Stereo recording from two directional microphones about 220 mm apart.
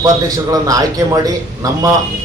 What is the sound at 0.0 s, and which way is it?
A man's voice, 15° right (ahead or behind).